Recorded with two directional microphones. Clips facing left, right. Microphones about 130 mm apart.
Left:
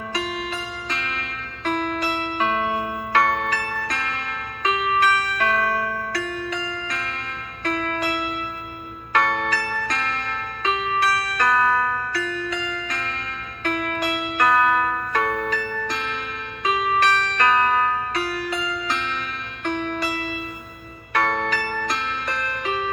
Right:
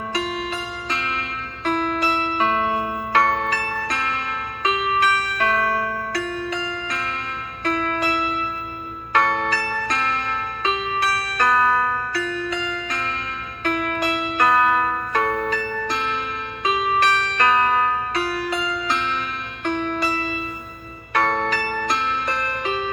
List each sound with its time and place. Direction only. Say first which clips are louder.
0.9 s zither: right 4 dB; 30° right (ahead or behind)
1.6 s music: right 2 dB; 30° right (ahead or behind)